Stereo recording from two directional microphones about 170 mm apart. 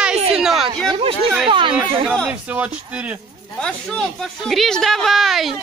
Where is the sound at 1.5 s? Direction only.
30° right (ahead or behind).